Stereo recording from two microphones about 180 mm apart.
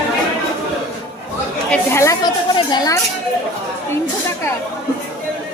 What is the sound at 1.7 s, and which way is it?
Speech, 15° left (ahead or behind).